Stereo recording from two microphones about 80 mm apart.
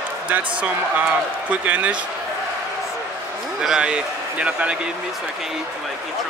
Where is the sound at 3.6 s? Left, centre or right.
Centre.